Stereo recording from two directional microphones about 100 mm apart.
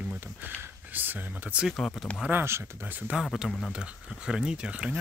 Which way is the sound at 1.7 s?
5° left (ahead or behind).